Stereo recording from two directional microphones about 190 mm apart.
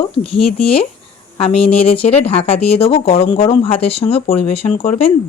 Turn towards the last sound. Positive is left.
turn(degrees=35)  # may be behind; listen again after turning